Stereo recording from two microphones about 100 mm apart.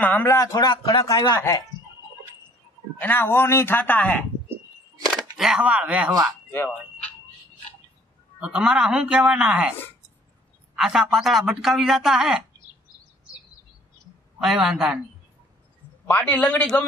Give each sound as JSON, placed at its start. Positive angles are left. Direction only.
{"t": 0.0, "sound": "a man's voice", "side_deg": 15}
{"t": 0.3, "sound": "a man's voice", "side_deg": 35}
{"t": 3.0, "sound": "speech", "side_deg": 20}
{"t": 5.4, "sound": "speech", "side_deg": -10}
{"t": 8.4, "sound": "speech", "side_deg": -10}
{"t": 10.8, "sound": "speech", "side_deg": -5}
{"t": 14.4, "sound": "speech", "side_deg": -5}
{"t": 16.1, "sound": "a man's voice", "side_deg": 15}